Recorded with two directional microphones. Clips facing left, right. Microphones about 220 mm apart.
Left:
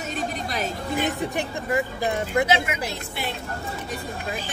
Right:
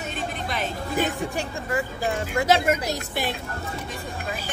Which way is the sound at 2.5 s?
45° right (ahead or behind).